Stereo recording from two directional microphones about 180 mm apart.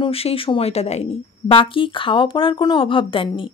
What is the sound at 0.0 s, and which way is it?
A woman's voice, 30° left (ahead or behind).